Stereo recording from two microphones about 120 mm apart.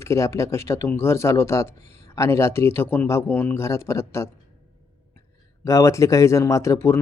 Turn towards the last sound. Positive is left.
turn(degrees=25)  # may be behind; listen again after turning